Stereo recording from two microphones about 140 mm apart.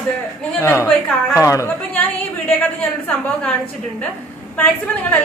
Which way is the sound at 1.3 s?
20° left (ahead or behind).